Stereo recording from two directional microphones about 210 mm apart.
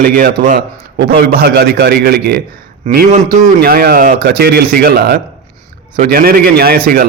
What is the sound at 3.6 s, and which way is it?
A man's voice, 45° right (ahead or behind).